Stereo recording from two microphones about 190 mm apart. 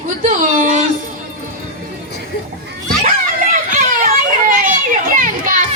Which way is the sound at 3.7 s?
45° right (ahead or behind).